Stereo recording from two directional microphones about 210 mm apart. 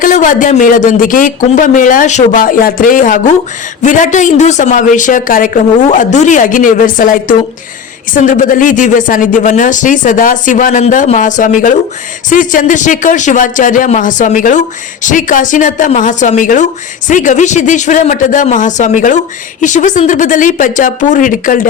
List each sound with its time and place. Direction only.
0.0 s speech: 40° left (ahead or behind)